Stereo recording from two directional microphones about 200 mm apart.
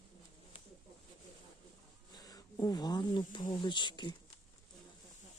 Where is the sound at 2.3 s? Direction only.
20° left (ahead or behind).